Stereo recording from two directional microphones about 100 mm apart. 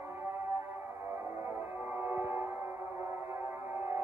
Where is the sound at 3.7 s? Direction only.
25° right (ahead or behind).